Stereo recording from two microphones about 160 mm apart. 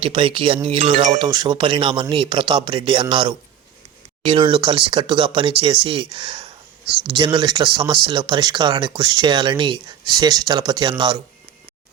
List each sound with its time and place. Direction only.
0.0 s speech: 30° right (ahead or behind)